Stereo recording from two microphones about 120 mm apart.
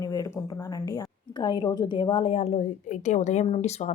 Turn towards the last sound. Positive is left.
turn(degrees=70)  # may be behind; listen again after turning